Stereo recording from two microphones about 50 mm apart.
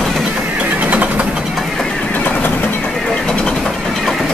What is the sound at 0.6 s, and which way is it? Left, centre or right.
Vehicle, right.